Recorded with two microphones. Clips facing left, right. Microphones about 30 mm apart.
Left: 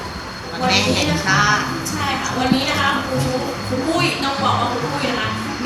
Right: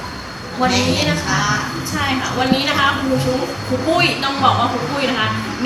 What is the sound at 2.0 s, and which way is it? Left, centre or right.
Speech, right.